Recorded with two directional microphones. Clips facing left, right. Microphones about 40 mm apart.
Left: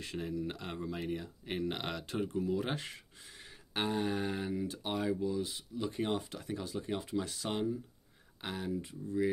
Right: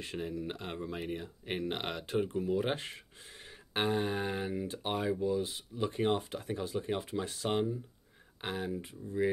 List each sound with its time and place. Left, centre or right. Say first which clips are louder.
0.5 s speech: right 1 dB; right
5.3 s speech: right 3 dB; right